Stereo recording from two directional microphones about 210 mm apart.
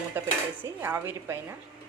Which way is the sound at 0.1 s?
10° right (ahead or behind).